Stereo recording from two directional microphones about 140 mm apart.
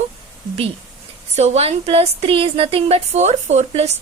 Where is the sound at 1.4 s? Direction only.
50° right (ahead or behind).